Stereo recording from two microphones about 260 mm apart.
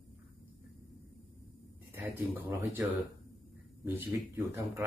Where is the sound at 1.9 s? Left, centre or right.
Centre.